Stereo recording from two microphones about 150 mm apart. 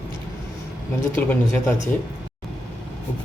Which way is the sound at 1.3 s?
10° left (ahead or behind).